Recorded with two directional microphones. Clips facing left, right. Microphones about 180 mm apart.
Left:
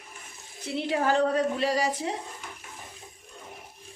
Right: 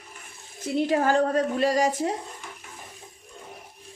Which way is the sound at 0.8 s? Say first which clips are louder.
Right 3 dB; 45° right (ahead or behind).